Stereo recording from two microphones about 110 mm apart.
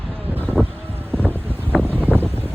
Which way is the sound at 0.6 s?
10° left (ahead or behind).